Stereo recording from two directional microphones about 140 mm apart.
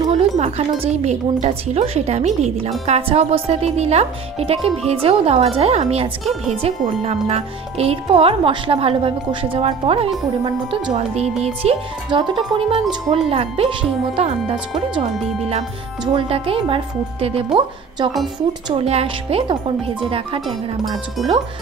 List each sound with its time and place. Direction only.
0.4 s speech: 50° right (ahead or behind)
12.1 s speech: 35° right (ahead or behind)
16.1 s speech: 40° right (ahead or behind)
21.2 s speech: centre (ahead or behind)